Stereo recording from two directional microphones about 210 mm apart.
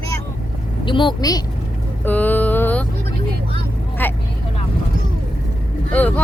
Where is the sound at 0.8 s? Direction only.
25° left (ahead or behind).